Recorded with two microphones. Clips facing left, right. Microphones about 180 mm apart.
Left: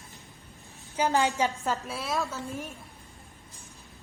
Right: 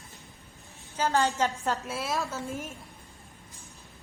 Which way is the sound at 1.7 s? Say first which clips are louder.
Even; centre (ahead or behind).